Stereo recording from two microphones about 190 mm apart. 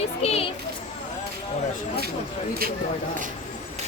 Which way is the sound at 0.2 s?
35° left (ahead or behind).